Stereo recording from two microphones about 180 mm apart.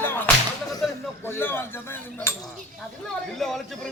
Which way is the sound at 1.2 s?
15° left (ahead or behind).